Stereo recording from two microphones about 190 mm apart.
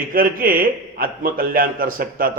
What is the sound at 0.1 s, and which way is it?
A man's voice, 50° right (ahead or behind).